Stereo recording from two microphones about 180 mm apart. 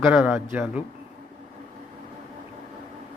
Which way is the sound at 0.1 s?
10° right (ahead or behind).